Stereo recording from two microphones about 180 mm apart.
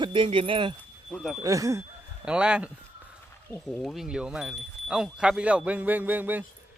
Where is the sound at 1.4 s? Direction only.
20° right (ahead or behind).